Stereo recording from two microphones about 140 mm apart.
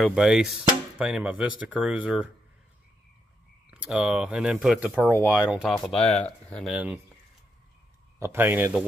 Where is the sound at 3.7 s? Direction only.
5° right (ahead or behind).